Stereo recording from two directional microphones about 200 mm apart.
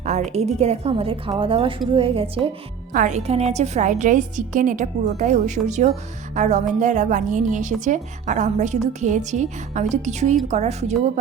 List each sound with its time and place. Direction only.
0.0 s a woman's voice: 35° right (ahead or behind)
2.9 s a woman's voice: 40° right (ahead or behind)